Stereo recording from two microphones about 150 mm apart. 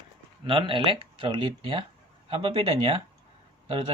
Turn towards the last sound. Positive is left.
turn(degrees=-35)  # may be behind; listen again after turning